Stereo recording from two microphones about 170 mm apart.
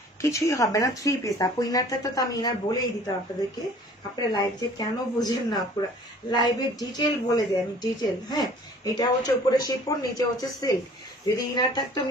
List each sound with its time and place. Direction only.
0.2 s a woman's voice: 20° left (ahead or behind)
4.3 s a woman's voice: 25° left (ahead or behind)